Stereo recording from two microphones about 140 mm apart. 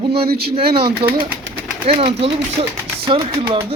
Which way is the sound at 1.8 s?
40° right (ahead or behind).